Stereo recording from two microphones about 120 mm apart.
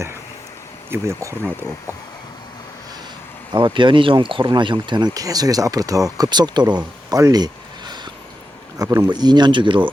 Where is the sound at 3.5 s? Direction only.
40° right (ahead or behind).